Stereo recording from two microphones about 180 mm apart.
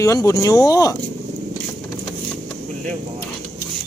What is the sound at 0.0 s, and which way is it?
Speech, 20° left (ahead or behind).